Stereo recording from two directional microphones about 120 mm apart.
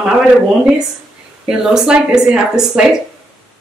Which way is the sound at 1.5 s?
5° right (ahead or behind).